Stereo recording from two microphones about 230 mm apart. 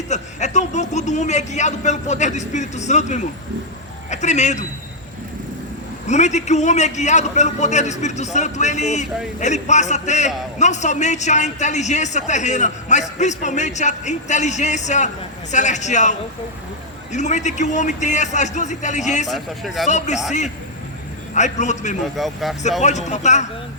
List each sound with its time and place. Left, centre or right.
0.1 s a man's voice: left
6.1 s a man's voice: left
19.3 s speech: centre
19.9 s a man's voice: left
21.3 s a man's voice: left
22.1 s speech: centre
22.8 s a man's voice: left